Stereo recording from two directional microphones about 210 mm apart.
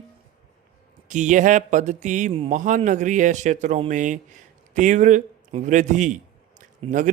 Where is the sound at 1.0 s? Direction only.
35° right (ahead or behind).